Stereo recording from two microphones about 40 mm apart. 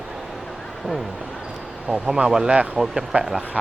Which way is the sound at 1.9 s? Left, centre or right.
Right.